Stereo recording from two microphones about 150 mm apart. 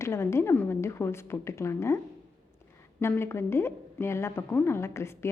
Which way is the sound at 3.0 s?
15° left (ahead or behind).